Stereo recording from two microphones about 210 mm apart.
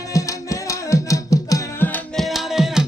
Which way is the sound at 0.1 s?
15° left (ahead or behind).